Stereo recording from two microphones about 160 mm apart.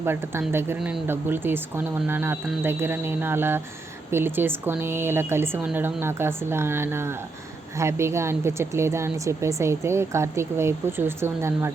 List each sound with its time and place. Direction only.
0.0 s speech: 15° right (ahead or behind)